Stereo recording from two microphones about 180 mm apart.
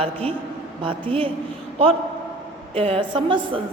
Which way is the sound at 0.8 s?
30° right (ahead or behind).